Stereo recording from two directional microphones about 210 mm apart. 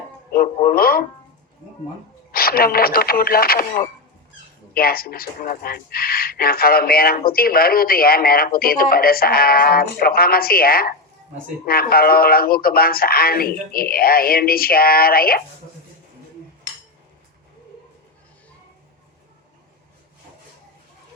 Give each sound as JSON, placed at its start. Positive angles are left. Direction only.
{"t": 0.3, "sound": "speech", "side_deg": 45}
{"t": 2.3, "sound": "speech", "side_deg": 45}